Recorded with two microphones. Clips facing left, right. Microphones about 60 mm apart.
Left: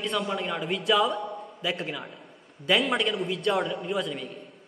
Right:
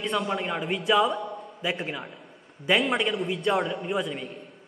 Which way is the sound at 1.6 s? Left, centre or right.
Centre.